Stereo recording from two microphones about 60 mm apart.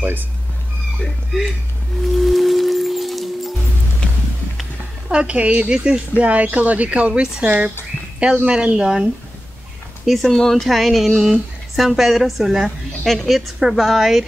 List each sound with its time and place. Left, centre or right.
2.1 s music: centre
4.0 s music: centre
5.1 s speech: centre
10.0 s speech: centre